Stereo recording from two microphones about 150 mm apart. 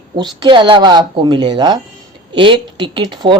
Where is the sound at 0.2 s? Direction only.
30° right (ahead or behind).